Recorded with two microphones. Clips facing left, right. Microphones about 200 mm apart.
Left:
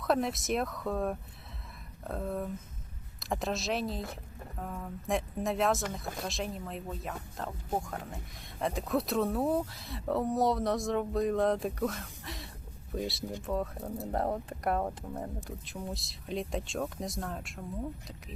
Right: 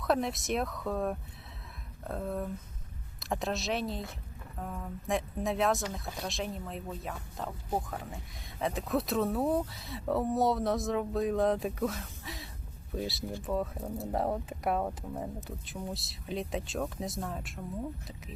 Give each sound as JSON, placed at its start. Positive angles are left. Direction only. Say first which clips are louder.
{"t": 0.0, "sound": "speech", "louder": "even", "side_deg": 0}